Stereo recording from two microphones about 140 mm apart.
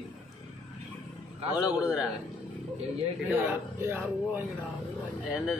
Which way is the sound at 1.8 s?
5° right (ahead or behind).